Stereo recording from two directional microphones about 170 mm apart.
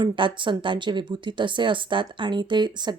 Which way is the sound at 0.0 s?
30° right (ahead or behind).